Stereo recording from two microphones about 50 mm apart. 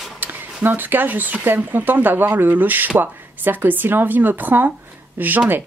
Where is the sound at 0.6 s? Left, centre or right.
Right.